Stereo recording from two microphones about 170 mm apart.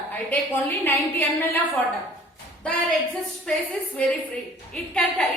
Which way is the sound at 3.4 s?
5° left (ahead or behind).